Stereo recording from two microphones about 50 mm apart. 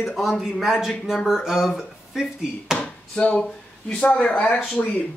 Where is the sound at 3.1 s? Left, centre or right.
Centre.